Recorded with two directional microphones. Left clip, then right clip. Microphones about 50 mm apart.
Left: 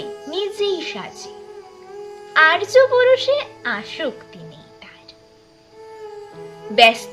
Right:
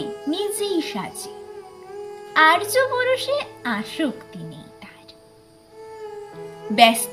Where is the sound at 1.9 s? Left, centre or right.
Centre.